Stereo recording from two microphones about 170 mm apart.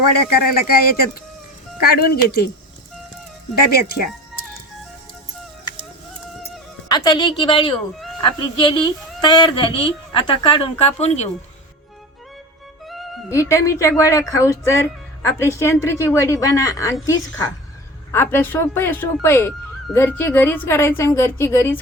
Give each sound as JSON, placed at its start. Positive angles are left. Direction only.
{"t": 0.5, "sound": "speech", "side_deg": 65}
{"t": 3.6, "sound": "speech", "side_deg": 65}
{"t": 6.8, "sound": "a woman's voice", "side_deg": 25}
{"t": 12.8, "sound": "music", "side_deg": 0}
{"t": 13.3, "sound": "speech", "side_deg": 15}